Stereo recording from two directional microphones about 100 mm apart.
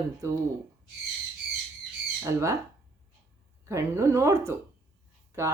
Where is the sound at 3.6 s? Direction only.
30° right (ahead or behind).